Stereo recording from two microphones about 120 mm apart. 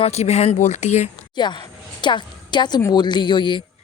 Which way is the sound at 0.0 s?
60° left (ahead or behind).